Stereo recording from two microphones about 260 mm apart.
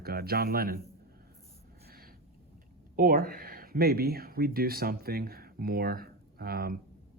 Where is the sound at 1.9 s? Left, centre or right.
Right.